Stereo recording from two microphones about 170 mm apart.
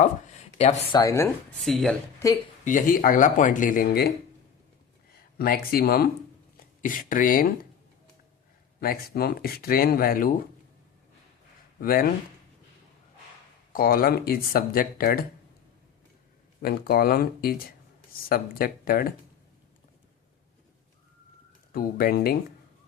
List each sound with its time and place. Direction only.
0.0 s a sound: 40° left (ahead or behind)
0.9 s speech: 15° left (ahead or behind)
1.6 s speech: centre (ahead or behind)
2.6 s speech: 50° left (ahead or behind)
5.4 s speech: 60° left (ahead or behind)
6.8 s speech: 50° left (ahead or behind)
8.8 s speech: 60° left (ahead or behind)
11.8 s speech: 60° left (ahead or behind)
13.7 s speech: 60° left (ahead or behind)
16.6 s speech: 65° left (ahead or behind)
21.7 s speech: 60° left (ahead or behind)